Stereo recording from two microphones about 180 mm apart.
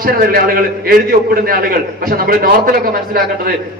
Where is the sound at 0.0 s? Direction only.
55° right (ahead or behind).